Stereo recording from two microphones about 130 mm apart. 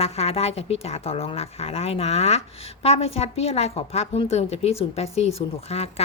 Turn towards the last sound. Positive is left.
turn(degrees=55)  # may be behind; listen again after turning